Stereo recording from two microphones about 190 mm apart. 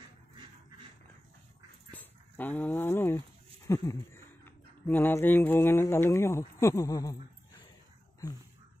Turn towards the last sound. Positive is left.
turn(degrees=15)  # may be behind; listen again after turning